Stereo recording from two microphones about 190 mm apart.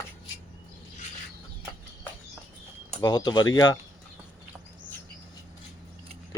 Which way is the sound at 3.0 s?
25° left (ahead or behind).